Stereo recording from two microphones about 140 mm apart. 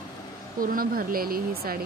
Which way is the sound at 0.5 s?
90° right.